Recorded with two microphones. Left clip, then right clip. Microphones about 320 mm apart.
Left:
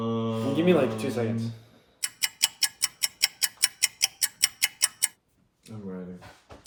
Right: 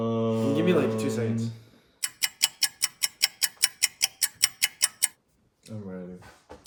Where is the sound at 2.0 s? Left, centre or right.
Centre.